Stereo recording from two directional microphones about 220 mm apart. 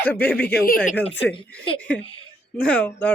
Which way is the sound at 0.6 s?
40° left (ahead or behind).